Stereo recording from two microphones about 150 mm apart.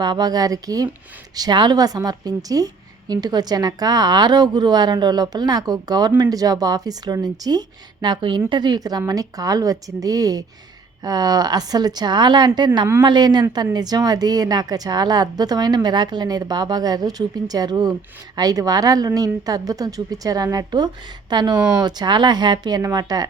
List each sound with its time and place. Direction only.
0.0 s a woman's voice: 25° right (ahead or behind)